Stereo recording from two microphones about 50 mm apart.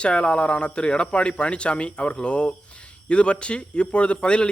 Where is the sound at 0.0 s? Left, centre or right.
Left.